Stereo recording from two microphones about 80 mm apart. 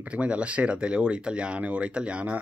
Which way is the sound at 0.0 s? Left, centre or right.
Centre.